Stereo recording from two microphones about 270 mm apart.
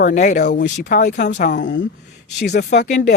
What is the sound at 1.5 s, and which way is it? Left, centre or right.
Speech, left.